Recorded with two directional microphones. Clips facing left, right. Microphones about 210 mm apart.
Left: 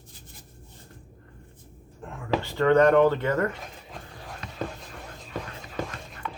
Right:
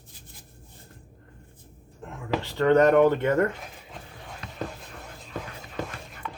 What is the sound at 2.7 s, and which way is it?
Speech, 20° right (ahead or behind).